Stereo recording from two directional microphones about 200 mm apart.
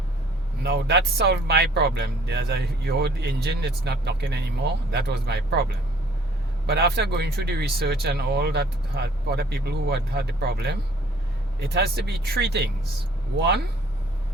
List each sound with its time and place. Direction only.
0.6 s speech: 55° right (ahead or behind)
6.7 s speech: 55° right (ahead or behind)